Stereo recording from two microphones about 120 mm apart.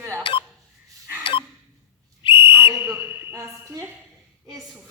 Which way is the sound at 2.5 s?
20° right (ahead or behind).